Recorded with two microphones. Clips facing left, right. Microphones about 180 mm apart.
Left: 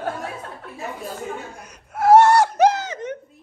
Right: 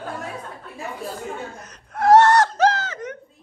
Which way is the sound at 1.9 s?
10° left (ahead or behind).